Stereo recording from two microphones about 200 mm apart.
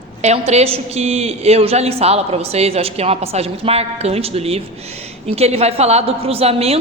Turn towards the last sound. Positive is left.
turn(degrees=-30)  # may be behind; listen again after turning